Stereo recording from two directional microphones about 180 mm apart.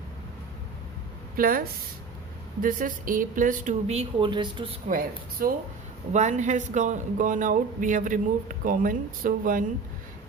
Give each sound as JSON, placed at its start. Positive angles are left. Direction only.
{"t": 1.4, "sound": "speech", "side_deg": -55}
{"t": 4.9, "sound": "speech", "side_deg": -50}